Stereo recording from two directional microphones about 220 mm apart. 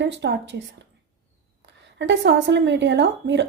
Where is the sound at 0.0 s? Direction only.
50° right (ahead or behind).